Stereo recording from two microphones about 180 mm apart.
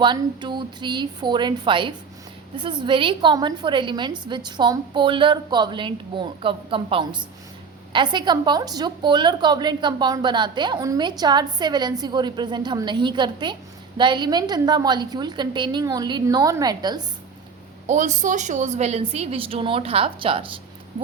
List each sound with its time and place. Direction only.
0.0 s a woman's voice: 25° right (ahead or behind)
17.8 s a woman's voice: 40° right (ahead or behind)